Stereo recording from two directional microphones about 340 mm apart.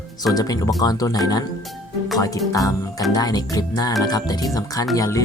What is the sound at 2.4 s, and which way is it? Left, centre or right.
Speech, centre.